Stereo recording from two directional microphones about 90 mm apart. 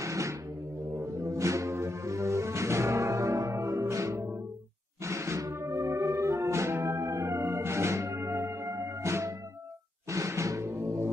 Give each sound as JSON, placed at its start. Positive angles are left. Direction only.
{"t": 0.0, "sound": "music", "side_deg": -35}